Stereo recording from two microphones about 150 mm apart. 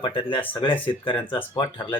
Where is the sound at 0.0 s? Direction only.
35° left (ahead or behind).